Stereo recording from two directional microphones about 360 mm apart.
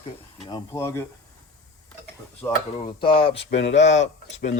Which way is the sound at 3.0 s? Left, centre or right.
Centre.